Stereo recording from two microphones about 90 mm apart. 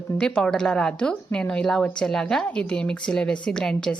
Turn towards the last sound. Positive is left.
turn(degrees=10)  # may be behind; listen again after turning